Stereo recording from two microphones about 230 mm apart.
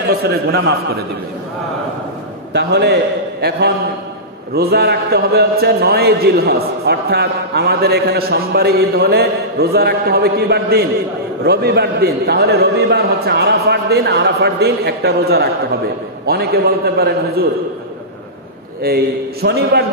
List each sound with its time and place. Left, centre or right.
0.2 s a man's voice: right
2.5 s a man's voice: right
18.8 s a man's voice: right